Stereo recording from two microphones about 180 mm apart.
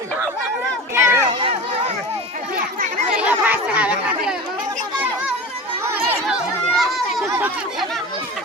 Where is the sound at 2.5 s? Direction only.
55° right (ahead or behind).